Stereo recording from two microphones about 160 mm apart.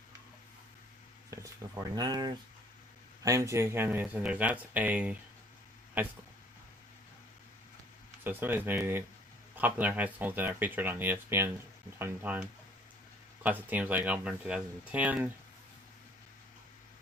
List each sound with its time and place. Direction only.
1.3 s speech: 20° right (ahead or behind)
8.2 s speech: 10° right (ahead or behind)